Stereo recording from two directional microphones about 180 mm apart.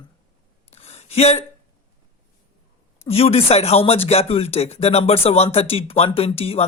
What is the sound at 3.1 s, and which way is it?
Speech, 35° left (ahead or behind).